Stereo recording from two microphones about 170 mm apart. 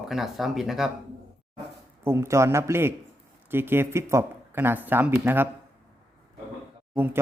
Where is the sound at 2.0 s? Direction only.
15° right (ahead or behind).